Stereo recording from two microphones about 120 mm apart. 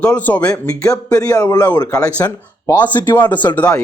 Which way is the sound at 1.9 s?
10° left (ahead or behind).